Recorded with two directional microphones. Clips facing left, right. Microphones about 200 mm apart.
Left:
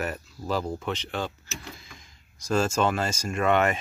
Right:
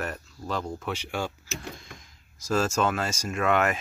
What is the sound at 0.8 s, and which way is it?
Speech, 10° right (ahead or behind).